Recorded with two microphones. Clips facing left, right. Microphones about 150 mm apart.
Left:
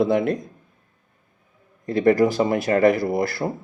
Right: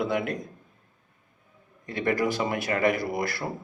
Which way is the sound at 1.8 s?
35° left (ahead or behind).